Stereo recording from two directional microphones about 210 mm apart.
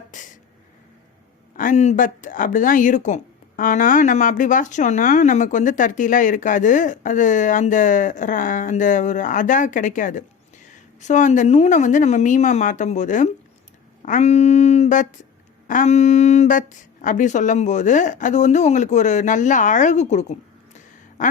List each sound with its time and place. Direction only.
0.1 s a sound: 35° left (ahead or behind)
1.5 s speech: 35° left (ahead or behind)
21.2 s quack: 35° left (ahead or behind)